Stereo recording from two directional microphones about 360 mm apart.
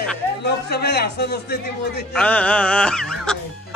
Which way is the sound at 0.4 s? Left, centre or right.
Left.